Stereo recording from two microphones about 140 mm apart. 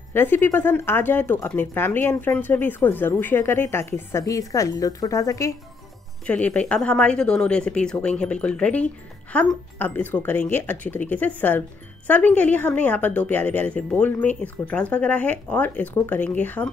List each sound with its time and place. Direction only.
0.1 s speech: 15° left (ahead or behind)
6.2 s speech: 10° left (ahead or behind)